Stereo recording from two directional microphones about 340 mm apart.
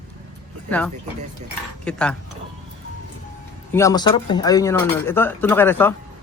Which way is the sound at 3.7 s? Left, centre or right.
Centre.